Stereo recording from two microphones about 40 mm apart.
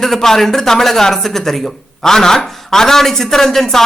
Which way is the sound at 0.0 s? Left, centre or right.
Centre.